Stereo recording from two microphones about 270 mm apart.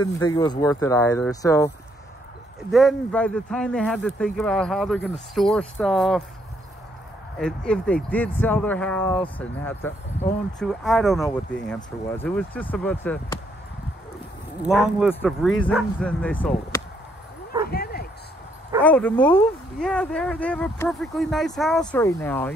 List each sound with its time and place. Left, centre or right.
0.0 s speech: centre
2.7 s speech: centre
7.3 s speech: centre
14.6 s speech: centre
17.6 s bow-wow: left
18.8 s speech: centre